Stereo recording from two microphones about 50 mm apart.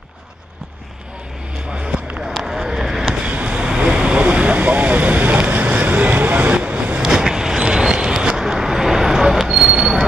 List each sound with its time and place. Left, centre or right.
1.7 s a sound: centre
2.1 s vehicle: centre
3.2 s vehicle: right
7.0 s vehicle: centre